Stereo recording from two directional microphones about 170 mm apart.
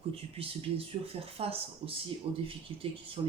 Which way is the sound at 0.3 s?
35° right (ahead or behind).